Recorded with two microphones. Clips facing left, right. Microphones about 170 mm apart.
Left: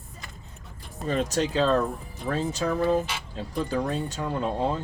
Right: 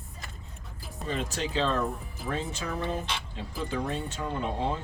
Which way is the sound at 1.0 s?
40° left (ahead or behind).